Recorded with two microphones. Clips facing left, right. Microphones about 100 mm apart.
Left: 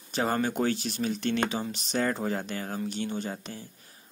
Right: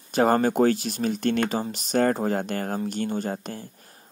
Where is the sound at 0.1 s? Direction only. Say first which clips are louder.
Right 7 dB; 50° right (ahead or behind).